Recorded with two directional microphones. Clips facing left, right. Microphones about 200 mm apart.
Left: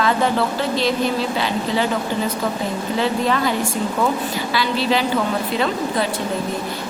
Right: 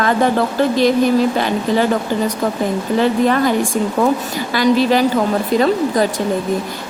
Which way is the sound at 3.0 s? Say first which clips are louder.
Right 5 dB; 50° right (ahead or behind).